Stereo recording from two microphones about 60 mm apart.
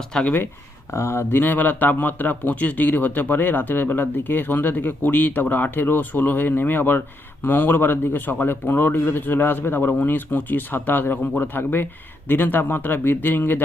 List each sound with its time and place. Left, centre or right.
0.1 s speech: centre
0.9 s speech: left